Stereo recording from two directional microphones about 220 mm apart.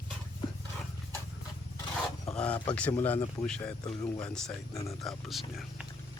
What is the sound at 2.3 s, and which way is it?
Speech, 5° left (ahead or behind).